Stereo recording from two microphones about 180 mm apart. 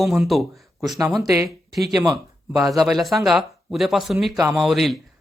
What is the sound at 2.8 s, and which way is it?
Speech, centre (ahead or behind).